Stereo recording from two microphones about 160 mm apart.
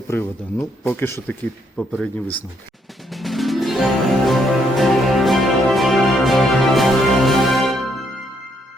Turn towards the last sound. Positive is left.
turn(degrees=0)  # may be behind; listen again after turning